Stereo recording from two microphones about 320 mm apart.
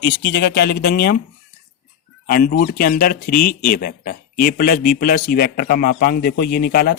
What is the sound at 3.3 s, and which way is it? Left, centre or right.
Speech, left.